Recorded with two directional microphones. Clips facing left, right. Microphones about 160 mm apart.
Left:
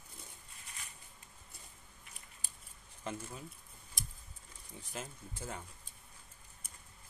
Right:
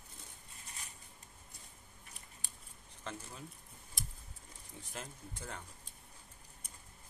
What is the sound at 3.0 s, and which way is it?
Speech, 10° left (ahead or behind).